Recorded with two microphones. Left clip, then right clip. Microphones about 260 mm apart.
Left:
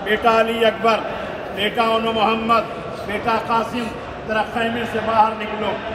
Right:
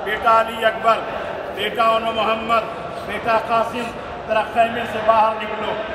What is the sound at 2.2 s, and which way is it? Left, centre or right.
A man's voice, centre.